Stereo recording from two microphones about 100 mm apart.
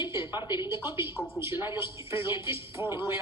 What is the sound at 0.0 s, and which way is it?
A woman's voice, 25° right (ahead or behind).